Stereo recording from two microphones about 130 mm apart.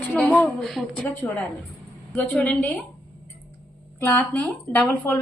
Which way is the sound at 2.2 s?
10° left (ahead or behind).